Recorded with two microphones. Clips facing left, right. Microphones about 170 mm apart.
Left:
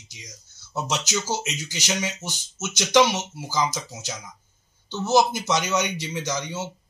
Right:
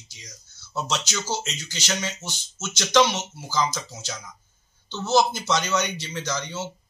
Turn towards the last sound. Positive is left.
turn(degrees=15)  # may be behind; listen again after turning